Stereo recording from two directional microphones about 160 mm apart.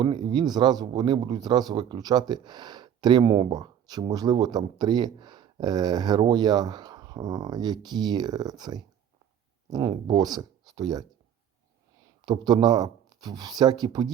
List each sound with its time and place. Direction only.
0.0 s speech: 30° right (ahead or behind)
12.2 s speech: 25° right (ahead or behind)